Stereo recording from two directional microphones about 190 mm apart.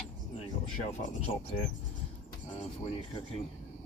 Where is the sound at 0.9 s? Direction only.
35° left (ahead or behind).